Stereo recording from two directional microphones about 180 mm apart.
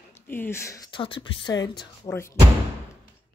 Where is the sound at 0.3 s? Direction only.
15° left (ahead or behind).